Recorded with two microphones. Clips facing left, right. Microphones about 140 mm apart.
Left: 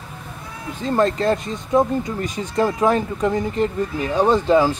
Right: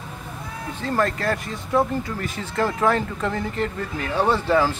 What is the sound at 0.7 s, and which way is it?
Speech, 20° left (ahead or behind).